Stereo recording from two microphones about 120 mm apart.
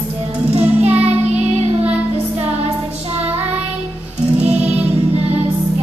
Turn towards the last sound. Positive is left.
turn(degrees=-10)  # may be behind; listen again after turning